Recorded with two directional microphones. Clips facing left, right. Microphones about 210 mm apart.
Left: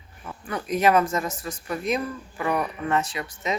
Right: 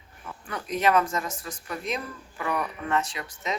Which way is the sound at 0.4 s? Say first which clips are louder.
Left 3 dB; 5° left (ahead or behind).